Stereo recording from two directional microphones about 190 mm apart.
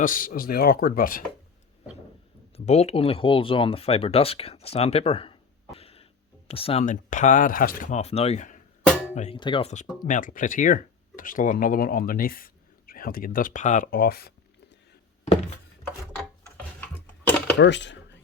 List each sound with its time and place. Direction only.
0.0 s speech: 45° left (ahead or behind)
2.6 s speech: 35° left (ahead or behind)
10.1 s speech: 45° left (ahead or behind)
16.6 s dishes: 10° left (ahead or behind)
17.6 s speech: 70° left (ahead or behind)